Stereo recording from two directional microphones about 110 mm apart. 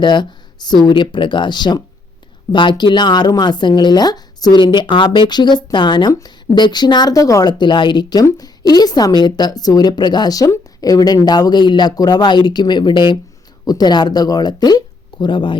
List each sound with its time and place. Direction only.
0.0 s a woman's voice: 45° left (ahead or behind)